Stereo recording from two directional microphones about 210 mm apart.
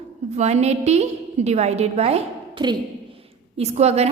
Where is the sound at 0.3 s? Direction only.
30° right (ahead or behind).